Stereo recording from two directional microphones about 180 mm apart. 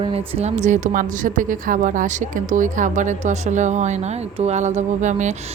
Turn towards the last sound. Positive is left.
turn(degrees=-40)  # may be behind; listen again after turning